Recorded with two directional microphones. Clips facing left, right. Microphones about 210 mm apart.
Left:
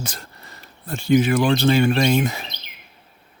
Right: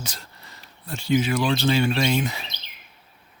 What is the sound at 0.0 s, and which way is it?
Speech, 50° left (ahead or behind).